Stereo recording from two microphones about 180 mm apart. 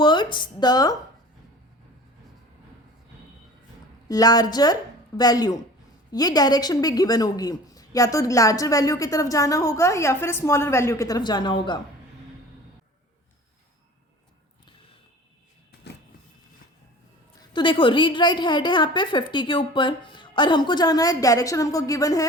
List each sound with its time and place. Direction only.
0.0 s a woman's voice: 25° left (ahead or behind)
4.1 s a woman's voice: 20° left (ahead or behind)
17.5 s a woman's voice: 25° left (ahead or behind)